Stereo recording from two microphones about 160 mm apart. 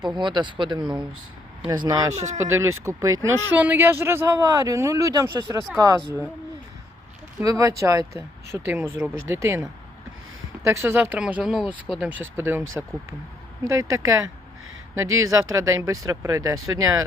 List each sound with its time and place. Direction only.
0.0 s a man's voice: 30° right (ahead or behind)
7.4 s a man's voice: 20° right (ahead or behind)